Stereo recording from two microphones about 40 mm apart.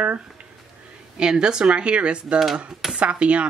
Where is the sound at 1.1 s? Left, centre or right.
Right.